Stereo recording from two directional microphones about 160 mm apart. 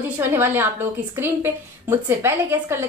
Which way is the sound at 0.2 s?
15° right (ahead or behind).